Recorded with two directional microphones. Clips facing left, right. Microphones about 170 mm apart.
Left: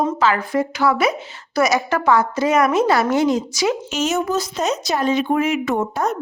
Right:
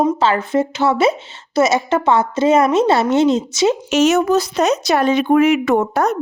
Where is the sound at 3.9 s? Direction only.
75° right (ahead or behind).